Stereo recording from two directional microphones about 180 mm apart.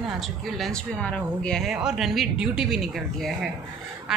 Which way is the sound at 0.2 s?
Centre (ahead or behind).